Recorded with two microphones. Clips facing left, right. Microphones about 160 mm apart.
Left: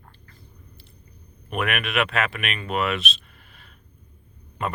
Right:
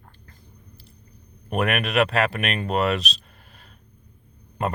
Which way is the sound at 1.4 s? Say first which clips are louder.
Right 3 dB; 35° right (ahead or behind).